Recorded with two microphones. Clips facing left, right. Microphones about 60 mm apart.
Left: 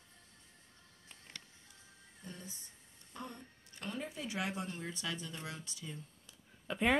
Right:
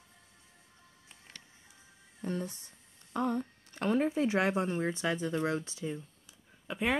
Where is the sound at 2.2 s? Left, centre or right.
Right.